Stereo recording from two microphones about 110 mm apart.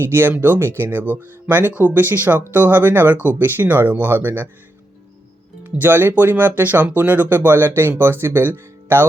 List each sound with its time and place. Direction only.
0.0 s speech: 20° right (ahead or behind)
5.6 s speech: 20° right (ahead or behind)